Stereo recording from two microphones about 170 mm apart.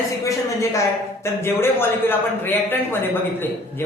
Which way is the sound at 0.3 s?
20° left (ahead or behind).